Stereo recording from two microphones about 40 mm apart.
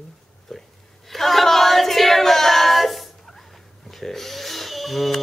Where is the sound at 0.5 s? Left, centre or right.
Centre.